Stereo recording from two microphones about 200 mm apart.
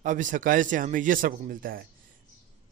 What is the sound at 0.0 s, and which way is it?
Speech, 40° right (ahead or behind).